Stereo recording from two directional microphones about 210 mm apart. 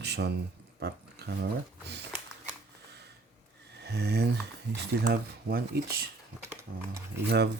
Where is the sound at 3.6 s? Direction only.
50° right (ahead or behind).